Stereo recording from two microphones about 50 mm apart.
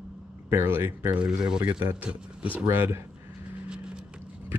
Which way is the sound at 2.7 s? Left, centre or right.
Right.